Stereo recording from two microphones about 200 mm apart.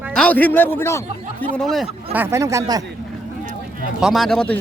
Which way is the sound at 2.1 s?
15° right (ahead or behind).